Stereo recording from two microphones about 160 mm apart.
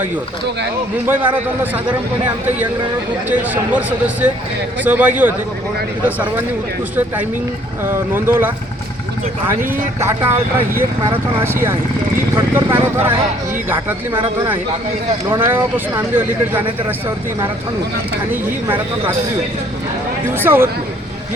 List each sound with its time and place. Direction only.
1.0 s speech: 10° right (ahead or behind)
3.2 s speech: 10° right (ahead or behind)
7.9 s speech: 15° right (ahead or behind)
11.4 s speech: 15° right (ahead or behind)
14.1 s speech: 30° right (ahead or behind)
15.3 s speech: 15° right (ahead or behind)
18.3 s speech: 10° right (ahead or behind)
20.4 s speech: 15° right (ahead or behind)